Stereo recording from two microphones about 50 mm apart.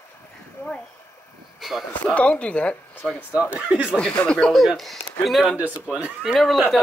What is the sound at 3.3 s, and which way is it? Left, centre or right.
Speech, right.